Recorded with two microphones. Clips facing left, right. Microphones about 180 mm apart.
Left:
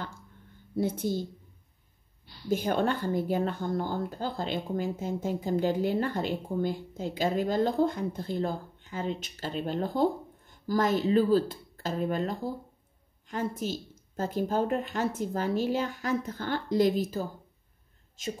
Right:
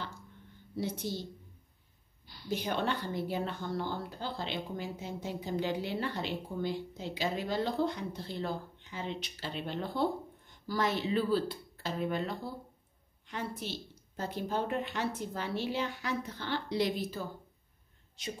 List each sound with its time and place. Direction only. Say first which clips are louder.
0.7 s speech: left 7 dB; 50° left (ahead or behind)
2.4 s speech: left 6 dB; 50° left (ahead or behind)